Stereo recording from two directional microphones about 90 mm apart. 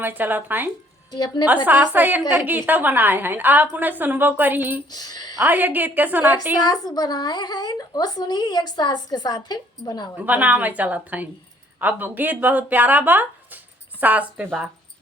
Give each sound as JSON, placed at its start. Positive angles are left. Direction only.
{"t": 0.0, "sound": "a woman's voice", "side_deg": -20}
{"t": 1.1, "sound": "speech", "side_deg": 50}
{"t": 1.6, "sound": "a woman's voice", "side_deg": -20}
{"t": 4.9, "sound": "speech", "side_deg": 50}
{"t": 5.4, "sound": "a woman's voice", "side_deg": -20}
{"t": 6.6, "sound": "speech", "side_deg": 45}
{"t": 10.2, "sound": "a woman's voice", "side_deg": -15}